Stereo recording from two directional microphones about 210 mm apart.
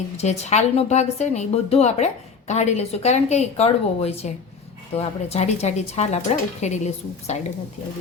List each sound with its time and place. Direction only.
0.2 s a woman's voice: 30° left (ahead or behind)